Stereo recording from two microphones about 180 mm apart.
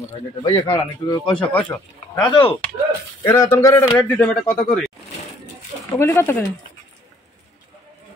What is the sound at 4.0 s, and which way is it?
Speech, 5° left (ahead or behind).